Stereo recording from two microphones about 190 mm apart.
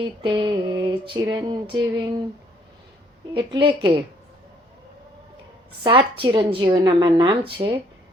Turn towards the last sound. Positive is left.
turn(degrees=-25)  # may be behind; listen again after turning